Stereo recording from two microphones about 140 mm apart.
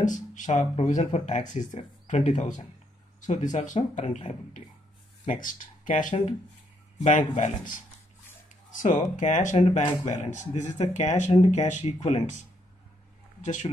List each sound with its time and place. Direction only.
0.0 s speech: 65° left (ahead or behind)
0.7 s speech: 50° left (ahead or behind)
5.2 s speech: 70° left (ahead or behind)
9.1 s speech: 60° left (ahead or behind)
13.4 s speech: 60° left (ahead or behind)